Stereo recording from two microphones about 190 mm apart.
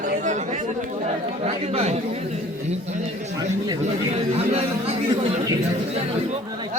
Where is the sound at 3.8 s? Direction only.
35° right (ahead or behind).